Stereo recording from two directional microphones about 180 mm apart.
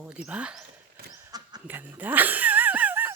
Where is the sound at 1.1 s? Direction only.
20° right (ahead or behind).